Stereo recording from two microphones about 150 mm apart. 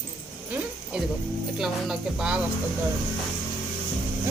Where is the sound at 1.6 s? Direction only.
5° right (ahead or behind).